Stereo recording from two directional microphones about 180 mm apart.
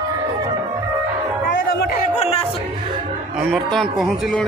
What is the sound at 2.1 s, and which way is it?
Music, 35° left (ahead or behind).